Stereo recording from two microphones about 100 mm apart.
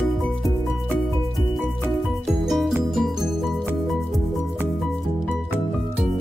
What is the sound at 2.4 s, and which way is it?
Music, centre (ahead or behind).